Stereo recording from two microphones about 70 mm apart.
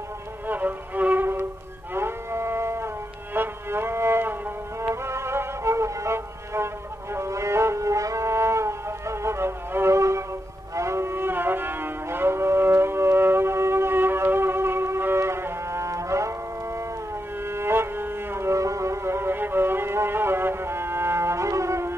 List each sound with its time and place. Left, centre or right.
0.5 s music: right
2.0 s a sound: right
3.3 s music: right
4.8 s violin: right
7.2 s music: right
17.5 s music: right